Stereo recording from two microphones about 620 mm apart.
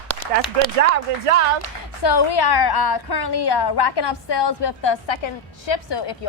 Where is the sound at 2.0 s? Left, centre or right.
Left.